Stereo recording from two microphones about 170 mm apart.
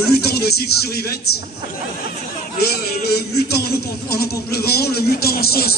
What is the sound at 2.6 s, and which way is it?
A man's voice, 70° left (ahead or behind).